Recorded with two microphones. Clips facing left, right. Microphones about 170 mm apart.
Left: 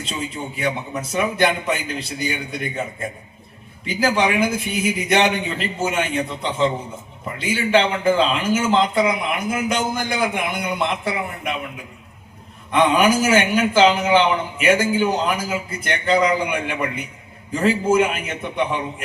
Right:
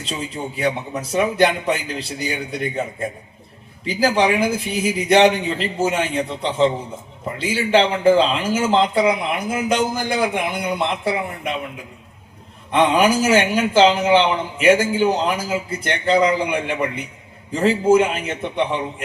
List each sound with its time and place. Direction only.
0.0 s speech: 35° right (ahead or behind)
3.8 s speech: 35° right (ahead or behind)
12.7 s a man's voice: 30° right (ahead or behind)